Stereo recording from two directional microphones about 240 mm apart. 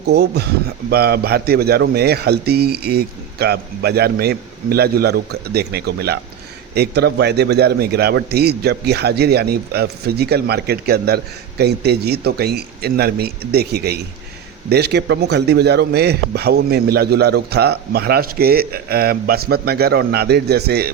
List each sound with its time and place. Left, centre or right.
0.1 s a man's voice: right